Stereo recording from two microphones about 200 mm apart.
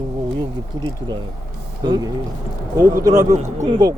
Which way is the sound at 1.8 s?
20° right (ahead or behind).